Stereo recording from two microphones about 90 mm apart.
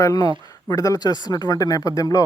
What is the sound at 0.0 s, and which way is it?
Speech, 40° left (ahead or behind).